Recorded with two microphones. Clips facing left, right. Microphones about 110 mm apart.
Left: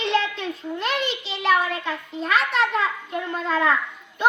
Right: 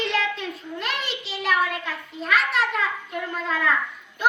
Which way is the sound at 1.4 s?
30° left (ahead or behind).